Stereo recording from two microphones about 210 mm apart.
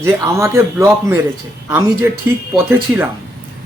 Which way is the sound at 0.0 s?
15° right (ahead or behind).